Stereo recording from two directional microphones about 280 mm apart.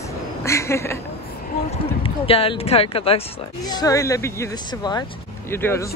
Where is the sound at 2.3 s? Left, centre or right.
Centre.